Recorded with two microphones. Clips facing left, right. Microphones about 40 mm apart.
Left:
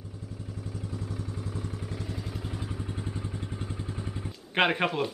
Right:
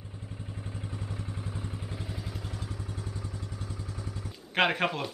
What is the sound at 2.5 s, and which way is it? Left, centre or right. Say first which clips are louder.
Vehicle: left 3 dB; centre.